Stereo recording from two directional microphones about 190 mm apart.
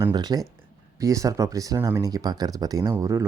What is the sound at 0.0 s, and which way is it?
Speech, 20° right (ahead or behind).